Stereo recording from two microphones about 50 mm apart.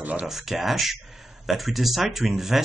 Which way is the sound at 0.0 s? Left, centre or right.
Right.